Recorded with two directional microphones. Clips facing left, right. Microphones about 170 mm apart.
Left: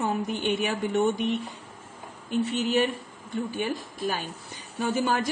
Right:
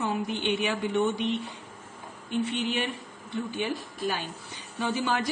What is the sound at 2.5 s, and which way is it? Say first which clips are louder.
Speech: left 5 dB; 45° left (ahead or behind).